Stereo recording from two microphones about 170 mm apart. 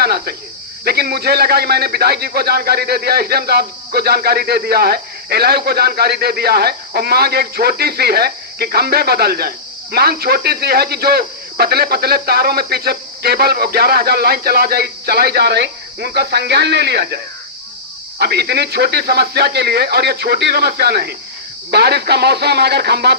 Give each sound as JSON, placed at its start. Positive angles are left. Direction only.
{"t": 0.0, "sound": "cricket", "side_deg": -65}
{"t": 0.9, "sound": "speech", "side_deg": -65}
{"t": 18.2, "sound": "speech", "side_deg": -75}